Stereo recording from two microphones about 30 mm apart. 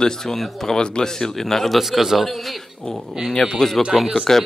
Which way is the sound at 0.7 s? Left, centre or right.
Left.